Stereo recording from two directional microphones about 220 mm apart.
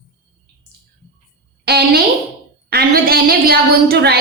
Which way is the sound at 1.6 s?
45° right (ahead or behind).